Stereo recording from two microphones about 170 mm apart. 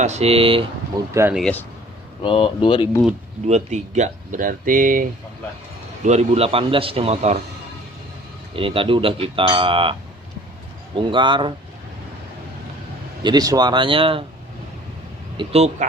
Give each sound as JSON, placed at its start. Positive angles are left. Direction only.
{"t": 0.0, "sound": "a man's voice", "side_deg": -40}
{"t": 0.9, "sound": "speech", "side_deg": -25}
{"t": 1.3, "sound": "speech", "side_deg": 0}
{"t": 2.2, "sound": "speech", "side_deg": 30}
{"t": 3.4, "sound": "speech", "side_deg": -40}
{"t": 6.0, "sound": "a man's voice", "side_deg": -40}
{"t": 8.5, "sound": "a man's voice", "side_deg": -30}
{"t": 10.9, "sound": "speech", "side_deg": -30}
{"t": 13.2, "sound": "speech", "side_deg": -20}
{"t": 15.4, "sound": "a man's voice", "side_deg": -40}